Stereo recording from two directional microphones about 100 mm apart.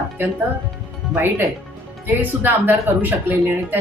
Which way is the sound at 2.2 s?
20° right (ahead or behind).